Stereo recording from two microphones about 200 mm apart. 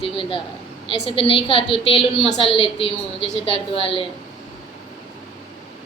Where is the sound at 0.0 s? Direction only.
25° left (ahead or behind).